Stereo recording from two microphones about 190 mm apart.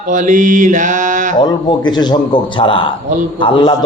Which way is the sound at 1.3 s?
20° left (ahead or behind).